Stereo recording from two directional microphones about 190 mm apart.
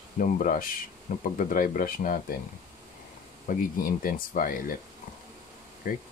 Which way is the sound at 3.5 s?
45° left (ahead or behind).